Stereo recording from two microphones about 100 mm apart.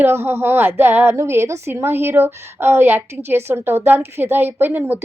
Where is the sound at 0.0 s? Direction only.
25° right (ahead or behind).